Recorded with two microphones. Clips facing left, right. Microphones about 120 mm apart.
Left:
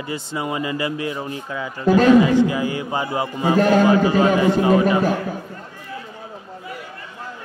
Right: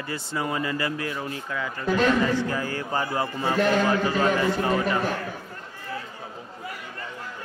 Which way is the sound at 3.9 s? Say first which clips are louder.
Left 7 dB; 15° left (ahead or behind).